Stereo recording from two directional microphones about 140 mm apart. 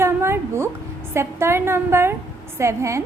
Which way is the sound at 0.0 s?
20° right (ahead or behind).